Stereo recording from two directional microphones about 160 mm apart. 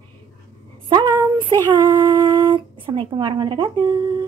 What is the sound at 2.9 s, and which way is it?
Speech, 30° right (ahead or behind).